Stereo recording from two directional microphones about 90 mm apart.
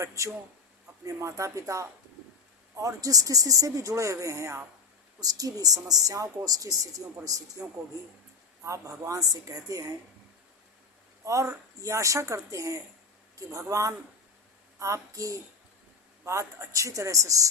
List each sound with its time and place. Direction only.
0.0 s a woman's voice: 35° right (ahead or behind)
11.2 s speech: 35° right (ahead or behind)